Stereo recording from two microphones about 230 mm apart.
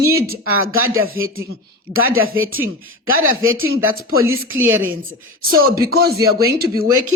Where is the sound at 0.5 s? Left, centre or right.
Right.